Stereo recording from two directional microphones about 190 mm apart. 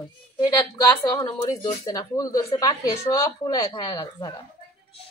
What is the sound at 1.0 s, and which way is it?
Speech, 20° left (ahead or behind).